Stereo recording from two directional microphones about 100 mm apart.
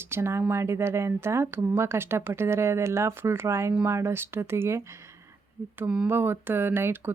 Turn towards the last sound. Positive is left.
turn(degrees=-20)  # may be behind; listen again after turning